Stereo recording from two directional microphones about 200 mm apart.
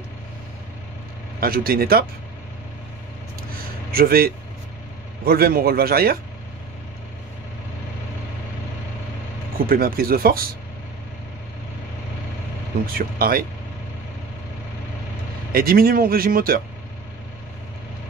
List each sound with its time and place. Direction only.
1.4 s speech: 50° right (ahead or behind)
3.9 s speech: 50° right (ahead or behind)
9.7 s speech: 45° right (ahead or behind)
12.9 s speech: 50° right (ahead or behind)
15.5 s speech: 50° right (ahead or behind)